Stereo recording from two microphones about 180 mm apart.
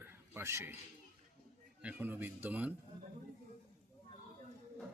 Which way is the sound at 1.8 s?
10° right (ahead or behind).